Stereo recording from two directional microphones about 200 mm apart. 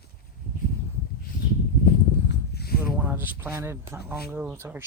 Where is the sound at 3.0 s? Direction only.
10° right (ahead or behind).